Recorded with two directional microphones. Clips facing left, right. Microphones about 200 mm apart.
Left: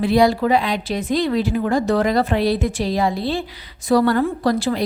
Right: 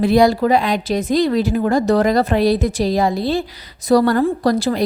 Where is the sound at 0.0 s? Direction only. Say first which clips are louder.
Right 2 dB; 40° right (ahead or behind).